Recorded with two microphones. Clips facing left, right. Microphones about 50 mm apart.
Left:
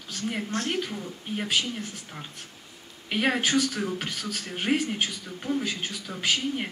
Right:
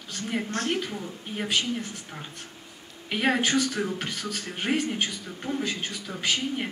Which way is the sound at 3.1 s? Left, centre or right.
Centre.